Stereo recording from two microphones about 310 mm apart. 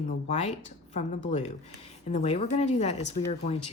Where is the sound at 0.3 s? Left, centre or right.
Left.